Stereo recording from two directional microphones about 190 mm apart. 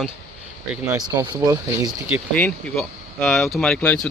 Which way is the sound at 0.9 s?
20° right (ahead or behind).